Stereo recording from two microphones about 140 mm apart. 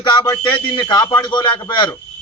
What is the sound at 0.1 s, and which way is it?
A man's voice, 30° left (ahead or behind).